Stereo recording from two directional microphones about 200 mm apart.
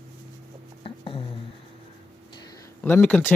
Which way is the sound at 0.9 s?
25° left (ahead or behind).